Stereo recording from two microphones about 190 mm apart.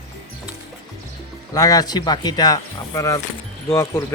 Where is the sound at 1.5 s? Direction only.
20° left (ahead or behind).